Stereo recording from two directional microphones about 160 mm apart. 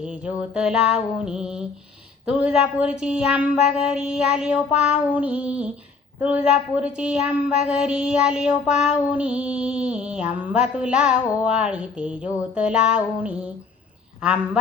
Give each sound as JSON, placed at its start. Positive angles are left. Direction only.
{"t": 0.0, "sound": "child singing", "side_deg": -5}
{"t": 2.2, "sound": "a woman's voice", "side_deg": -5}
{"t": 3.0, "sound": "child singing", "side_deg": -5}
{"t": 6.1, "sound": "a woman's voice", "side_deg": -10}